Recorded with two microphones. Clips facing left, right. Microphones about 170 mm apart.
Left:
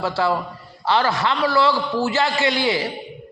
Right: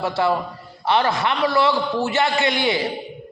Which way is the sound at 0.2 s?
20° right (ahead or behind).